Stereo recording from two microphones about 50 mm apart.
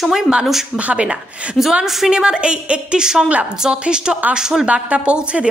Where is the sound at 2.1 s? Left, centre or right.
Centre.